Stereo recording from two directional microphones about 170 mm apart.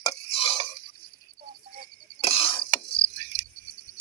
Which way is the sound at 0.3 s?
35° left (ahead or behind).